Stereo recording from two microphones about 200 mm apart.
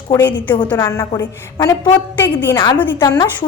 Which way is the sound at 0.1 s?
10° left (ahead or behind).